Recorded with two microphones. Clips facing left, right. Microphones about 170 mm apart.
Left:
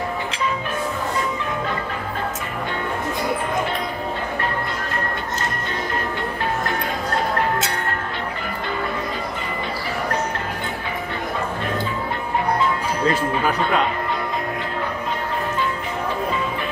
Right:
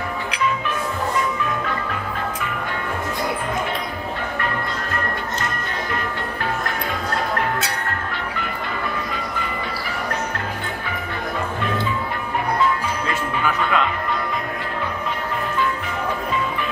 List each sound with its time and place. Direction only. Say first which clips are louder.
13.0 s music: left 7 dB; 35° left (ahead or behind)